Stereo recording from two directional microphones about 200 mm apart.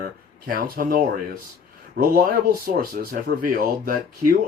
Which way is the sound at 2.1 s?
45° right (ahead or behind).